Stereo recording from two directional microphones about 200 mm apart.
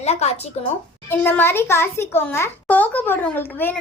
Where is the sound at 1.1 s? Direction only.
10° left (ahead or behind).